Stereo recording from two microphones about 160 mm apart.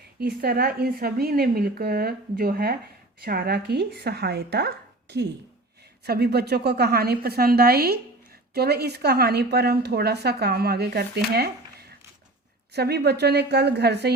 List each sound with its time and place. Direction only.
0.2 s a woman's voice: 80° right
6.1 s a woman's voice: 85° right